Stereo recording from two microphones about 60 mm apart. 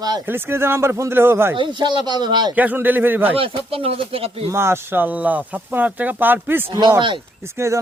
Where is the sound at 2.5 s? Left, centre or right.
Right.